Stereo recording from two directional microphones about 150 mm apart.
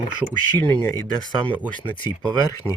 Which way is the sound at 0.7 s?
15° left (ahead or behind).